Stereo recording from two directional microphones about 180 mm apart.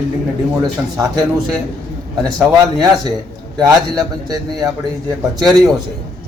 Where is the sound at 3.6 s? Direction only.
20° right (ahead or behind).